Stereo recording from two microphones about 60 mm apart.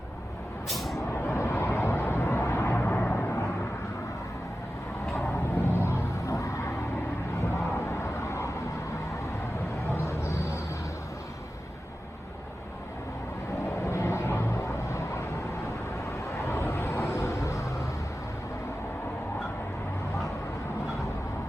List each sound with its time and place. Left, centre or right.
0.7 s vehicle: centre
1.1 s vehicle: left
2.7 s vehicle: left
5.2 s a sound: left
9.9 s a sound: left
13.8 s vehicle: left
16.3 s vehicle: left